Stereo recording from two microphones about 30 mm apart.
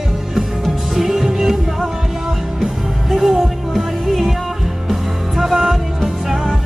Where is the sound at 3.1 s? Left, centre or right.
Centre.